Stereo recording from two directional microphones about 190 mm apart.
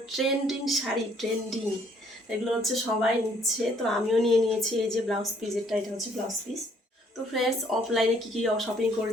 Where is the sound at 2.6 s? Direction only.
Centre (ahead or behind).